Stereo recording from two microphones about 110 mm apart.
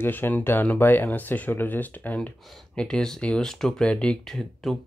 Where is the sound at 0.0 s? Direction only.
20° left (ahead or behind).